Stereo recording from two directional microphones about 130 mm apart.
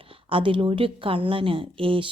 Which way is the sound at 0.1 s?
45° right (ahead or behind).